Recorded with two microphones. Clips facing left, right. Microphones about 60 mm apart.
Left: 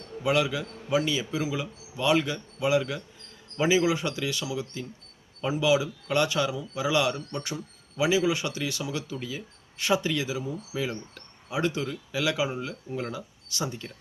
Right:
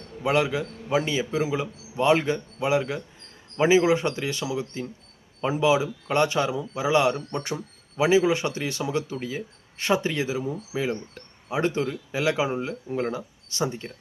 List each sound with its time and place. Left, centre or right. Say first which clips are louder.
0.2 s speech: right 2 dB; right
10.7 s speech: right 4 dB; right